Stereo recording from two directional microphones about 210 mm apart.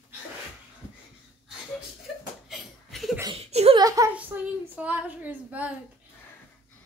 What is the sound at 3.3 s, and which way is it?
Giggle, 30° right (ahead or behind).